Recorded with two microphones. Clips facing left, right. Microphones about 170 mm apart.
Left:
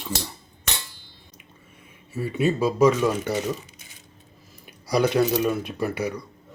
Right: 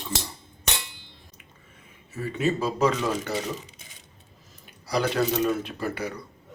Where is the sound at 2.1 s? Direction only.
10° left (ahead or behind).